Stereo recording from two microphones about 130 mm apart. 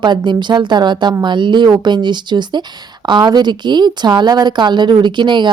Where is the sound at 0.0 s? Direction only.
35° right (ahead or behind).